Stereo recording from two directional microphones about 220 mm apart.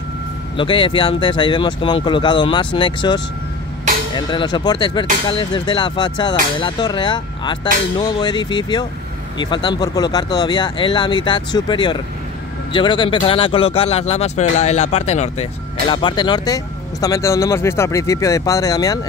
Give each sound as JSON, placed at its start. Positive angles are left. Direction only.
{"t": 0.6, "sound": "speech", "side_deg": 25}